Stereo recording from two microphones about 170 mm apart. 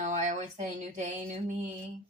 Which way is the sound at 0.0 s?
45° right (ahead or behind).